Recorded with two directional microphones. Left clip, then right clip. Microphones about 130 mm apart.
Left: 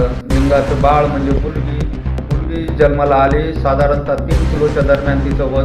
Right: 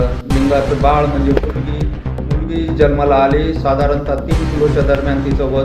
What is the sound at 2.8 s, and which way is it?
Speech, 15° right (ahead or behind).